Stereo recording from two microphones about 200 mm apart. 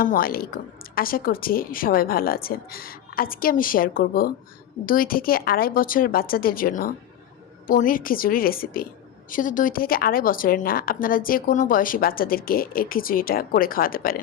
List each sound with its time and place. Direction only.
0.0 s a woman's voice: 45° left (ahead or behind)